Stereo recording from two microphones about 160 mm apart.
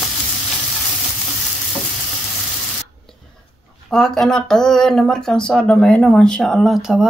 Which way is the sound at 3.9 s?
5° left (ahead or behind).